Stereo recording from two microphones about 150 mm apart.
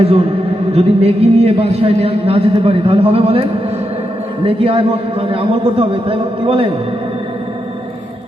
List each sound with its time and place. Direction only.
0.0 s a man's voice: 40° right (ahead or behind)